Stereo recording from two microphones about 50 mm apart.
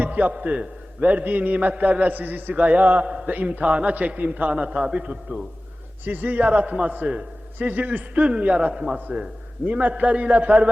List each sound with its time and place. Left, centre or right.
0.0 s a man's voice: right
6.1 s a man's voice: right; by 9.0 s centre
9.6 s a man's voice: right